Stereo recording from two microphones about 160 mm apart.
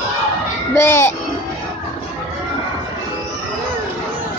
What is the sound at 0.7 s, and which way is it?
Speech, 15° left (ahead or behind).